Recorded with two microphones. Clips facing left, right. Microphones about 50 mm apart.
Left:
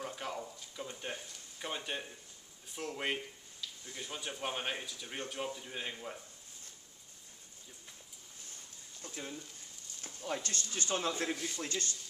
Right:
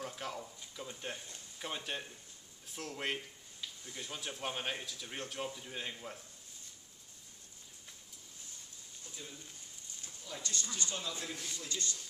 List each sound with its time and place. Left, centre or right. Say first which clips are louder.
0.0 s a sound: left 2 dB; centre
0.7 s speech: left 2 dB; centre
9.0 s speech: left 7 dB; left